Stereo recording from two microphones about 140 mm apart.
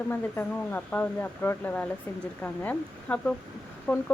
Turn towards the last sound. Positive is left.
turn(degrees=15)  # may be behind; listen again after turning